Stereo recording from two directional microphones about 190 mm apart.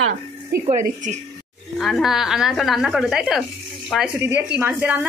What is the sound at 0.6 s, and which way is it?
Speech, 40° right (ahead or behind).